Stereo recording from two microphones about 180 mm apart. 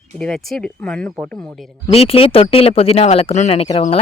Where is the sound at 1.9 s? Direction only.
30° left (ahead or behind).